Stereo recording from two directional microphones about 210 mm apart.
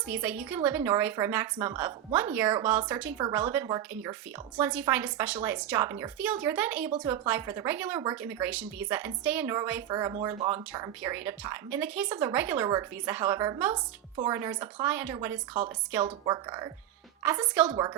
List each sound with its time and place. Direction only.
0.1 s a woman's voice: 5° right (ahead or behind)